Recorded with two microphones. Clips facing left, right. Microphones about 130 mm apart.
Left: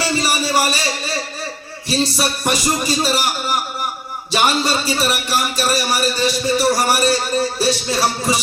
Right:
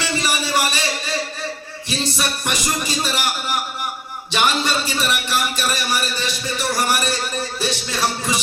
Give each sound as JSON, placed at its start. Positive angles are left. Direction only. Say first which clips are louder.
{"t": 0.0, "sound": "music", "louder": "left 3 dB", "side_deg": 35}
{"t": 1.9, "sound": "a man's voice", "louder": "left 5 dB", "side_deg": 35}